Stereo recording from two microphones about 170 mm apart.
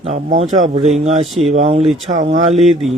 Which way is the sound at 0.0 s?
40° right (ahead or behind).